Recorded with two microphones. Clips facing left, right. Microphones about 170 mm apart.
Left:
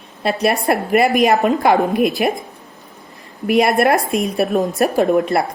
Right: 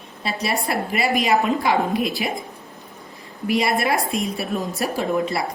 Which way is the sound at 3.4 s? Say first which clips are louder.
Left 7 dB; 50° left (ahead or behind).